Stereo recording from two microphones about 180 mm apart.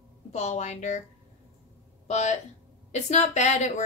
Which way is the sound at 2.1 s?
40° left (ahead or behind).